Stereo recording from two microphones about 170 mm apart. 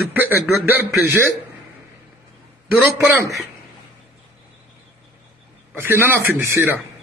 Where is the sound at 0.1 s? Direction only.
10° right (ahead or behind).